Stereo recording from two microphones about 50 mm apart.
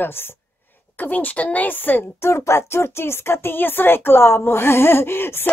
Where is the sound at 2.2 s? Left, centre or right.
Left.